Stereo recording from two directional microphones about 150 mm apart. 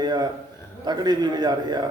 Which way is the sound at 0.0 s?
30° right (ahead or behind).